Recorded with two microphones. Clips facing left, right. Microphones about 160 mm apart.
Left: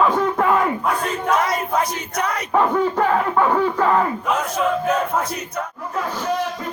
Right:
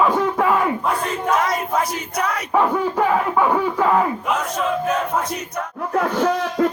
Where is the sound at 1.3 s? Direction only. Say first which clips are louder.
Even; centre (ahead or behind).